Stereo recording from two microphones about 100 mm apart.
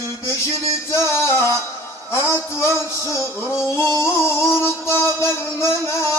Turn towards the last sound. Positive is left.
turn(degrees=30)  # may be behind; listen again after turning